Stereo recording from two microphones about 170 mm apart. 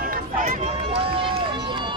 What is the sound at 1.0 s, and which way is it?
Run, 30° right (ahead or behind).